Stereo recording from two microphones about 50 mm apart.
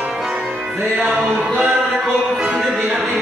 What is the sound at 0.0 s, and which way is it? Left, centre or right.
Music, centre.